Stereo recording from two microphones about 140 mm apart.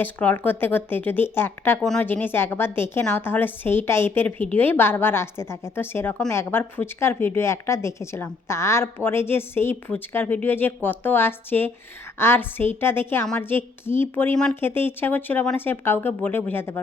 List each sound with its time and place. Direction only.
0.0 s speech: 10° left (ahead or behind)
1.8 s a woman's voice: 5° left (ahead or behind)
2.0 s speech: 15° left (ahead or behind)